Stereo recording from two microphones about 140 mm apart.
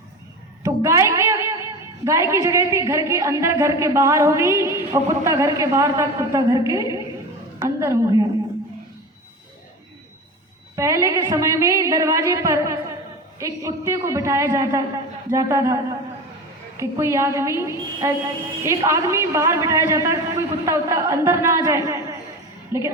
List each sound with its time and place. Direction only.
0.6 s a woman's voice: 20° right (ahead or behind)
10.8 s a woman's voice: 20° right (ahead or behind)